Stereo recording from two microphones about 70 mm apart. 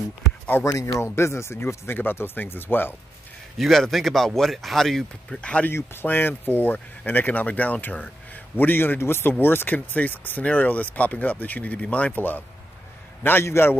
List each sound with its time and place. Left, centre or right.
0.7 s speech: left
3.5 s speech: centre
5.4 s speech: centre
5.7 s speech: left